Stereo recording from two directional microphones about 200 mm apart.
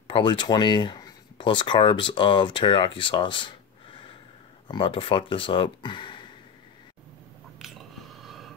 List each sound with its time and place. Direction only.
0.1 s speech: 25° left (ahead or behind)
4.6 s speech: 25° left (ahead or behind)
7.5 s a sound: centre (ahead or behind)